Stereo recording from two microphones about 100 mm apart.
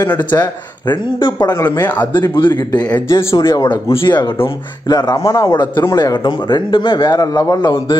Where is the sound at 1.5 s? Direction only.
35° left (ahead or behind).